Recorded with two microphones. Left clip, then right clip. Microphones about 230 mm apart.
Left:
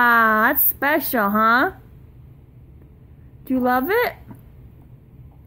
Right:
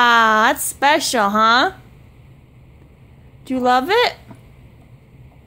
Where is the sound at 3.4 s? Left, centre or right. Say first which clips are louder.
Right 4 dB; centre.